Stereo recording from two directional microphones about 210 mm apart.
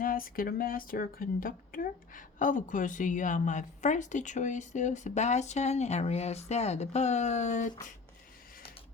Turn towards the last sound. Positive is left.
turn(degrees=35)  # may be behind; listen again after turning